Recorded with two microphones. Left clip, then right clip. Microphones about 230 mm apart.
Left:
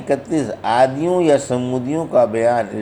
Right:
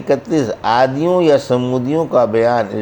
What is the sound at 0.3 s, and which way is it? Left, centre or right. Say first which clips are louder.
Speech: right 4 dB; right.